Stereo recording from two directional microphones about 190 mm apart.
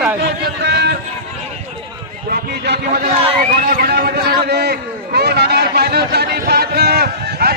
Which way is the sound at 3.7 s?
55° right (ahead or behind).